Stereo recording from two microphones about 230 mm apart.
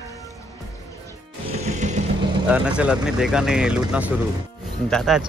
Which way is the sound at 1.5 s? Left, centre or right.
Right.